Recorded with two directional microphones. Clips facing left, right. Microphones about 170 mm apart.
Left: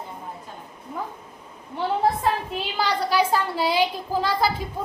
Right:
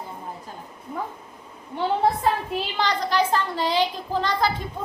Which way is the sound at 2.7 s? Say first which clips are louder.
Left 1 dB; 10° left (ahead or behind).